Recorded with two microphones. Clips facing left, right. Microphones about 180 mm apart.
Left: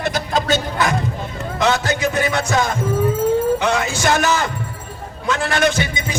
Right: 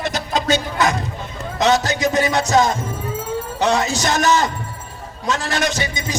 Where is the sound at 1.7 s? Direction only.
55° left (ahead or behind).